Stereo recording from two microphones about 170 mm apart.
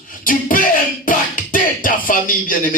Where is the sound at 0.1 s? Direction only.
55° left (ahead or behind).